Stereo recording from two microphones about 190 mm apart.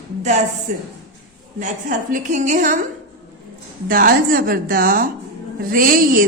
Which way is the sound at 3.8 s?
50° right (ahead or behind).